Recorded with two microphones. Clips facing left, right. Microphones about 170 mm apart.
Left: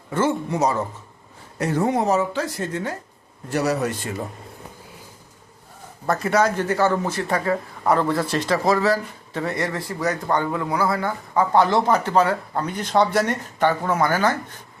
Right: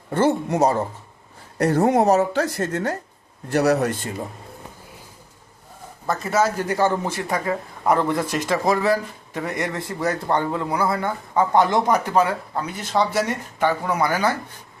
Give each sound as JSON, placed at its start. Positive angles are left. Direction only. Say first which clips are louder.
{"t": 0.1, "sound": "a man's voice", "louder": "right 2 dB", "side_deg": -40}
{"t": 3.5, "sound": "speech", "louder": "right 3 dB", "side_deg": -60}
{"t": 6.1, "sound": "speech", "louder": "left 1 dB", "side_deg": 0}